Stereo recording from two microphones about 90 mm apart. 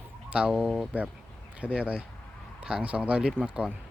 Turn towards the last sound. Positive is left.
turn(degrees=-10)  # may be behind; listen again after turning